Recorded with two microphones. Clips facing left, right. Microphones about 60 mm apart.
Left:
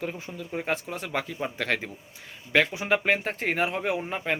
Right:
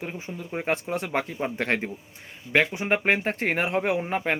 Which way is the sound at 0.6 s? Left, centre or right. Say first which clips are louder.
Right 6 dB; right.